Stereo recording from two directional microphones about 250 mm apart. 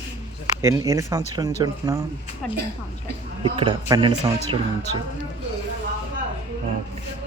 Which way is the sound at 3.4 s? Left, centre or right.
Centre.